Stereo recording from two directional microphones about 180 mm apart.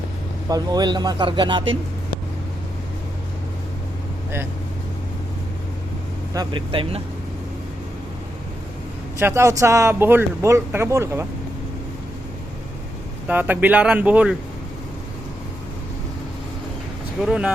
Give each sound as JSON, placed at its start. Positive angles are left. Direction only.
{"t": 0.4, "sound": "speech", "side_deg": -20}
{"t": 6.3, "sound": "speech", "side_deg": -25}
{"t": 9.1, "sound": "speech", "side_deg": -15}
{"t": 13.2, "sound": "speech", "side_deg": -10}
{"t": 17.2, "sound": "speech", "side_deg": -5}